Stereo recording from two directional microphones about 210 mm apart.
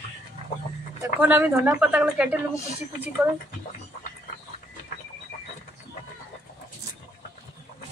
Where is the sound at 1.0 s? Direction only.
10° right (ahead or behind).